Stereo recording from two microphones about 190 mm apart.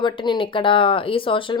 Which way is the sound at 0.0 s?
25° left (ahead or behind).